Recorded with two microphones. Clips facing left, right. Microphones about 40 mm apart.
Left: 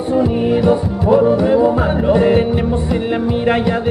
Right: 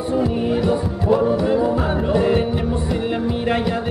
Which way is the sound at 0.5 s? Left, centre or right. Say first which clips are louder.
Left 5 dB; left.